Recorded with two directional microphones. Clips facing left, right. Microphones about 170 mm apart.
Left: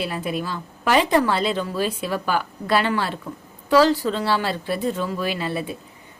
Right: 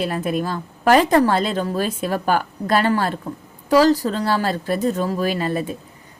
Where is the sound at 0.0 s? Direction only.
45° right (ahead or behind).